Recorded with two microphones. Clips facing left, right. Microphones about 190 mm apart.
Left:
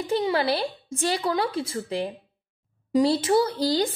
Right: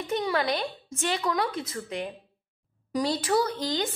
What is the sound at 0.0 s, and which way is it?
Speech, 30° left (ahead or behind).